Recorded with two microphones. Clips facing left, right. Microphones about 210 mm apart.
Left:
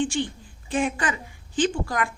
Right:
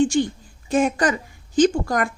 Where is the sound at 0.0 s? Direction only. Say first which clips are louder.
Right 7 dB; 40° right (ahead or behind).